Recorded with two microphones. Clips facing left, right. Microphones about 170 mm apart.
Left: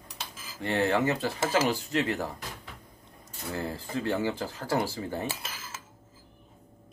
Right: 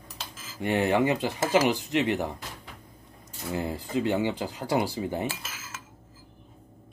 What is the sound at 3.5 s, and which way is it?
Speech, 15° right (ahead or behind).